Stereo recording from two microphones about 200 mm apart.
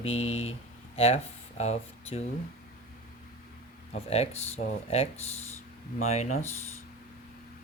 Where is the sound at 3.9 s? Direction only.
30° left (ahead or behind).